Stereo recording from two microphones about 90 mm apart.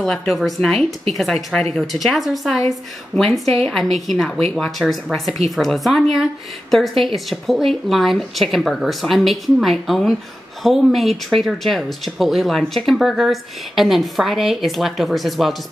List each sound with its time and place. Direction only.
0.3 s speech: centre (ahead or behind)